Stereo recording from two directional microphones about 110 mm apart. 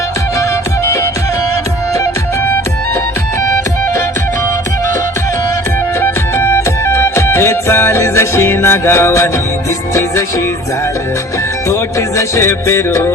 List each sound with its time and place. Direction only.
6.0 s music: 25° left (ahead or behind)
11.7 s music: 25° left (ahead or behind)